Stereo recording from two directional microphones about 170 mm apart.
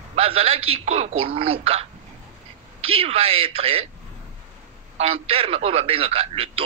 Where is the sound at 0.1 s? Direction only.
35° right (ahead or behind).